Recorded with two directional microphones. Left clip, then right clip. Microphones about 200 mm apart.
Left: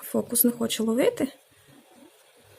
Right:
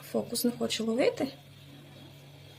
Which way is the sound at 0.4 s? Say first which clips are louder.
Left 5 dB; 40° left (ahead or behind).